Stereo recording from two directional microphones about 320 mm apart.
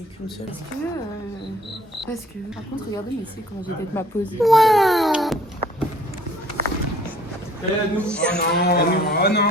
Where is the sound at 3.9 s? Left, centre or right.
Centre.